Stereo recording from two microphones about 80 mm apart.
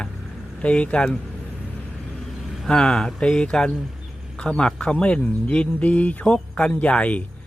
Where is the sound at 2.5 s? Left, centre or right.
Centre.